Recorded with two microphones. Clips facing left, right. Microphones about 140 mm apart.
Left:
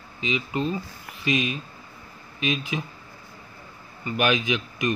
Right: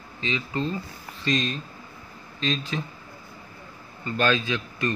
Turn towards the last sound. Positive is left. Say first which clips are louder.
# left 2 dB
turn(degrees=15)  # may be behind; listen again after turning